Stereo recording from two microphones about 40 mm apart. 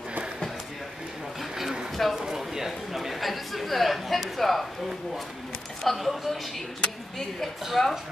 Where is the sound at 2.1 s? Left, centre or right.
Centre.